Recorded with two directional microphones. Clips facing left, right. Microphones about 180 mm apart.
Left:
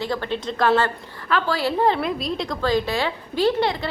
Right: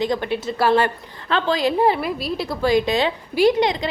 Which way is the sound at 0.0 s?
15° right (ahead or behind).